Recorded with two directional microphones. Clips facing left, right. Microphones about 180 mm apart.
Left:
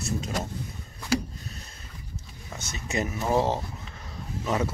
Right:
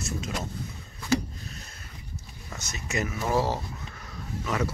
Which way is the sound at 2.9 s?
25° left (ahead or behind).